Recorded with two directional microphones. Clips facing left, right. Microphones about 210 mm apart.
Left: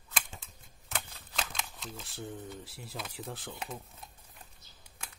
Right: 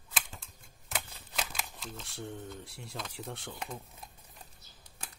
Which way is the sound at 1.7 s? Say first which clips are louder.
Even; centre (ahead or behind).